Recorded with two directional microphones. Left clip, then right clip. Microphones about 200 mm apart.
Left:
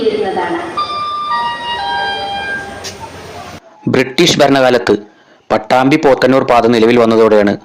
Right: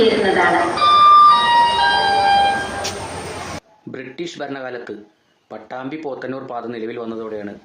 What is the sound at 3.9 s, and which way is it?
A man's voice, 40° left (ahead or behind).